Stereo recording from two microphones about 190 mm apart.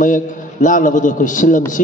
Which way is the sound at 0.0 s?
45° left (ahead or behind).